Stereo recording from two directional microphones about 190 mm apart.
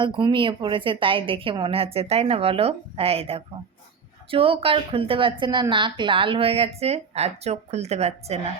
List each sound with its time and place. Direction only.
0.0 s a woman's voice: 25° right (ahead or behind)